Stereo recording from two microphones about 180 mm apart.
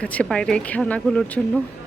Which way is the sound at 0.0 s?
5° left (ahead or behind).